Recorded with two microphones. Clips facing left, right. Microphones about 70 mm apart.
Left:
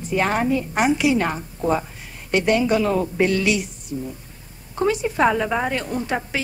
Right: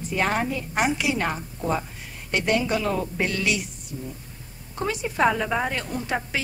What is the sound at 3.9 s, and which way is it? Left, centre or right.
Speech, left.